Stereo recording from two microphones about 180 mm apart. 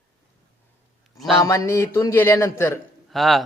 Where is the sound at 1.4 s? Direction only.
15° left (ahead or behind).